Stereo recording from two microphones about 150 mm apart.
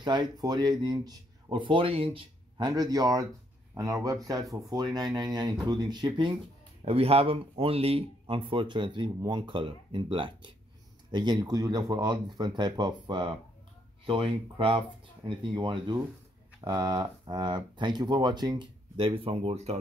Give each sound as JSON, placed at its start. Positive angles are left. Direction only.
{"t": 0.0, "sound": "speech", "side_deg": -30}
{"t": 6.8, "sound": "speech", "side_deg": -40}